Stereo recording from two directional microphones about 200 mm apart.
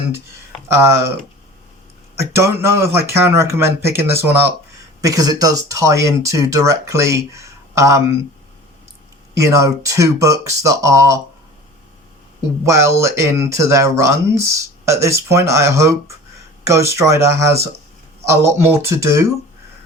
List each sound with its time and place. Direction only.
0.7 s speech: 15° right (ahead or behind)
2.1 s speech: 15° right (ahead or behind)
9.4 s speech: 15° right (ahead or behind)
12.6 s speech: 15° right (ahead or behind)